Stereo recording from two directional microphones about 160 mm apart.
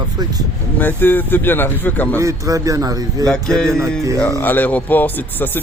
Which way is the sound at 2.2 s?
20° right (ahead or behind).